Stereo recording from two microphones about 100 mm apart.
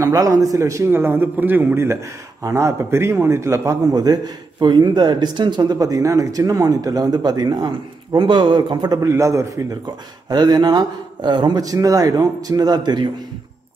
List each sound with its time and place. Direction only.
0.0 s a man's voice: 35° right (ahead or behind)
9.0 s a man's voice: 30° right (ahead or behind)
10.3 s speech: 45° right (ahead or behind)